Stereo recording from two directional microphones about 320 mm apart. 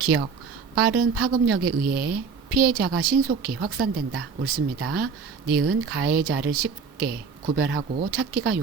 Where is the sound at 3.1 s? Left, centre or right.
Right.